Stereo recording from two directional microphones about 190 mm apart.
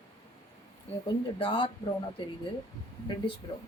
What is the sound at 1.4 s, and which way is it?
Speech, 25° left (ahead or behind).